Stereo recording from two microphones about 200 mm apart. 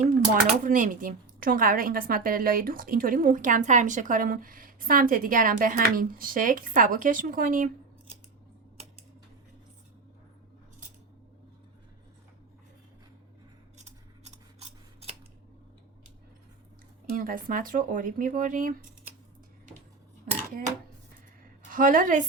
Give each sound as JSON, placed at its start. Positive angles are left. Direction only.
{"t": 0.0, "sound": "speech", "side_deg": -40}
{"t": 17.2, "sound": "speech", "side_deg": -45}
{"t": 21.7, "sound": "speech", "side_deg": -40}